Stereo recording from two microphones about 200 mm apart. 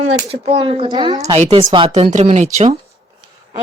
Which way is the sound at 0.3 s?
30° right (ahead or behind).